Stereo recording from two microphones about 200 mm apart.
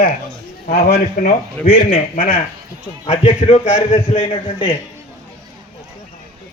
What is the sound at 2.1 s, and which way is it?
Speech, 45° left (ahead or behind).